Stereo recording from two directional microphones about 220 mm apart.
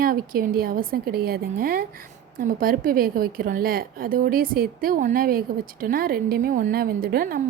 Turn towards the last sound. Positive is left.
turn(degrees=-40)  # may be behind; listen again after turning